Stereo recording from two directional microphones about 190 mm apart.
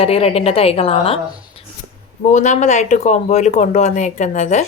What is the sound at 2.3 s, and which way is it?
A woman's voice, 40° left (ahead or behind).